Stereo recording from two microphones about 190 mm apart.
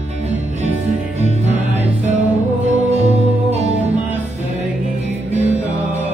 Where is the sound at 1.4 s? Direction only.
35° right (ahead or behind).